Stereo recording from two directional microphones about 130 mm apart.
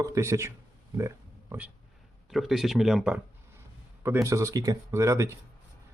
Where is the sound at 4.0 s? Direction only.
20° right (ahead or behind).